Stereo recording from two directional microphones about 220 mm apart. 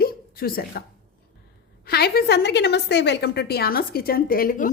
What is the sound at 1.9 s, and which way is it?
A woman's voice, 45° left (ahead or behind).